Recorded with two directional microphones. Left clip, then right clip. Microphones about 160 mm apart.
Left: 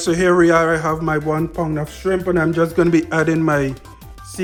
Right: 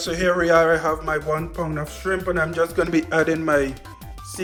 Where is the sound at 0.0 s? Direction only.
35° left (ahead or behind).